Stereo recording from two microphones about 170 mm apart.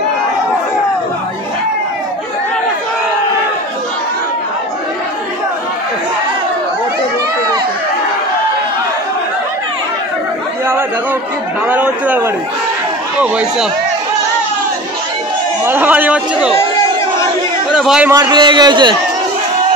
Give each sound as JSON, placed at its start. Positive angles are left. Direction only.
{"t": 11.6, "sound": "a man's voice", "side_deg": -10}
{"t": 15.6, "sound": "a man's voice", "side_deg": -10}
{"t": 17.7, "sound": "a man's voice", "side_deg": -5}
{"t": 18.1, "sound": "a man's voice", "side_deg": -25}